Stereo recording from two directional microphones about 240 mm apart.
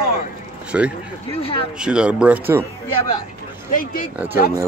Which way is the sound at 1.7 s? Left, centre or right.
Centre.